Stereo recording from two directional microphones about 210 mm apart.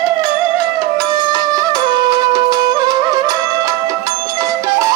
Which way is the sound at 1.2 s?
20° right (ahead or behind).